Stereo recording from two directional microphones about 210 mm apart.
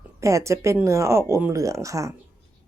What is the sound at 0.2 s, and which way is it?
A woman's voice, 15° right (ahead or behind).